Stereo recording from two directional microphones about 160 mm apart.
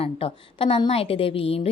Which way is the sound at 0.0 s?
35° left (ahead or behind).